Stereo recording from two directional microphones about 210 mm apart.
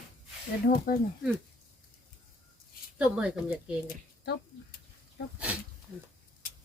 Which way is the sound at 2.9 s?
5° right (ahead or behind).